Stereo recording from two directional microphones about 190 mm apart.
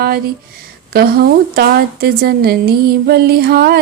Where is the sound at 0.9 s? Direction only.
55° right (ahead or behind).